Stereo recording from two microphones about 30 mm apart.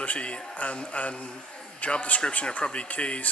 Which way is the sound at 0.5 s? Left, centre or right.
Left.